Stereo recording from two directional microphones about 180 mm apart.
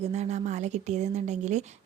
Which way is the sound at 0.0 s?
40° right (ahead or behind).